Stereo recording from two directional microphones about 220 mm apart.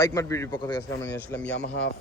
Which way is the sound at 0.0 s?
15° left (ahead or behind).